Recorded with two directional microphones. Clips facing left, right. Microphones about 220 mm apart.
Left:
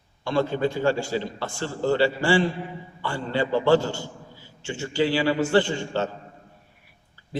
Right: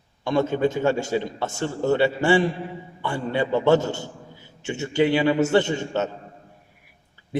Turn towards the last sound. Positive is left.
turn(degrees=-20)  # may be behind; listen again after turning